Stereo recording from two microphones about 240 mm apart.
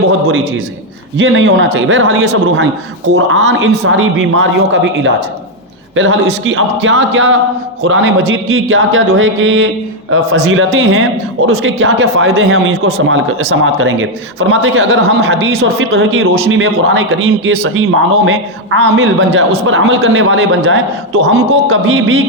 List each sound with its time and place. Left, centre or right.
1.2 s a man's voice: right